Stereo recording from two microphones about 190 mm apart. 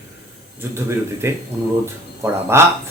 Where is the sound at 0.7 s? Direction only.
15° right (ahead or behind).